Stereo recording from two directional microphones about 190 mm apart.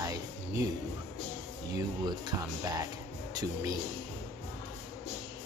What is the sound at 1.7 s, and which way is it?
Speech, 20° right (ahead or behind).